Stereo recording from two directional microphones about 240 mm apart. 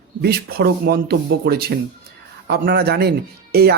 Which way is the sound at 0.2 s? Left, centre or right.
Right.